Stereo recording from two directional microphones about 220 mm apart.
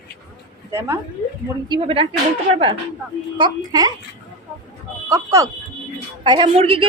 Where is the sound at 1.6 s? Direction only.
20° right (ahead or behind).